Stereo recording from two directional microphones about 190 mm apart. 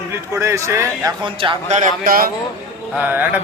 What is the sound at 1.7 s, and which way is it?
Speech, 45° right (ahead or behind).